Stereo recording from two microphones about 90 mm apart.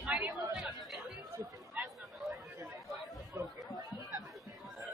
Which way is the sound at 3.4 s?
35° right (ahead or behind).